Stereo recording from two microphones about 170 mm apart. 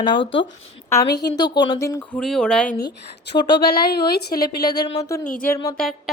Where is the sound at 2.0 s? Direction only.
5° left (ahead or behind).